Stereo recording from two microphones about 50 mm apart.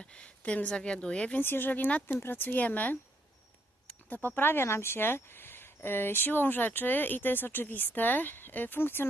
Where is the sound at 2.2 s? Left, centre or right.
Left.